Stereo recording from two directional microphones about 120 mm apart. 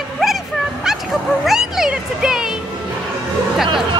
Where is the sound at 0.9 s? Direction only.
5° right (ahead or behind).